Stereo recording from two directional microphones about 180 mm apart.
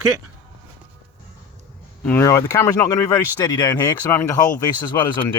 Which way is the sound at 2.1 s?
15° left (ahead or behind).